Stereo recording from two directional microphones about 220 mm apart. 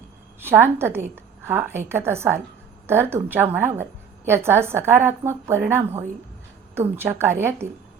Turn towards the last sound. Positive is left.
turn(degrees=-10)  # may be behind; listen again after turning